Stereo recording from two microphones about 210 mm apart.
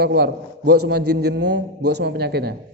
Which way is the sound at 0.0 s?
50° right (ahead or behind).